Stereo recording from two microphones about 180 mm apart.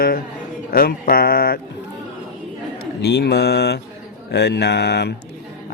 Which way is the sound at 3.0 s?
65° left (ahead or behind).